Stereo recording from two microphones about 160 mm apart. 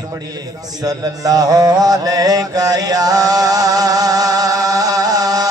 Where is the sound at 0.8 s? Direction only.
25° right (ahead or behind).